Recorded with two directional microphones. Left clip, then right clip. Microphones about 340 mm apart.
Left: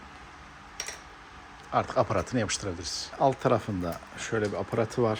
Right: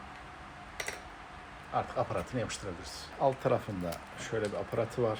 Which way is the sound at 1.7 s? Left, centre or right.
Left.